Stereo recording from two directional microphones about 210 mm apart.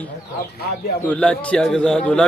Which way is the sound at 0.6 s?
50° left (ahead or behind).